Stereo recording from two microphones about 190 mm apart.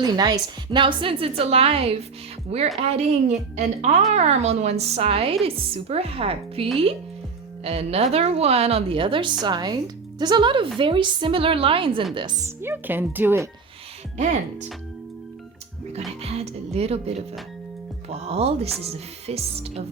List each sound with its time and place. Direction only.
0.0 s a woman's voice: 20° right (ahead or behind)
12.6 s speech: 10° right (ahead or behind)
15.9 s a woman's voice: 35° right (ahead or behind)
18.3 s a woman's voice: 30° right (ahead or behind)